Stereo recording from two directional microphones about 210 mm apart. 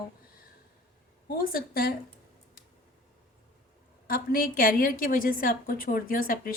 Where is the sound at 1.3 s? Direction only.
45° left (ahead or behind).